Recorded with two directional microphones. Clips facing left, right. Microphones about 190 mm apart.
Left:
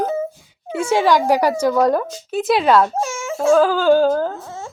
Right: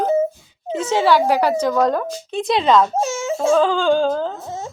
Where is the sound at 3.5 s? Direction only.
5° left (ahead or behind).